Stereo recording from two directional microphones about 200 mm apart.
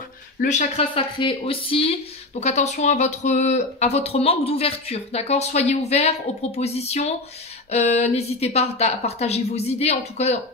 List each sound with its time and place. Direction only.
0.4 s speech: 35° left (ahead or behind)